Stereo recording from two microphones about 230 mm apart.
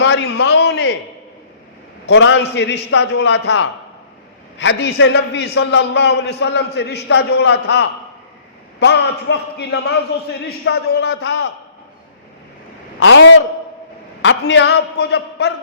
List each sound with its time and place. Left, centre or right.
0.0 s a man's voice: left
2.0 s a man's voice: left
13.0 s a man's voice: left